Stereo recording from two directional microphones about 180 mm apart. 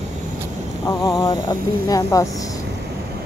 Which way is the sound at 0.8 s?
15° left (ahead or behind).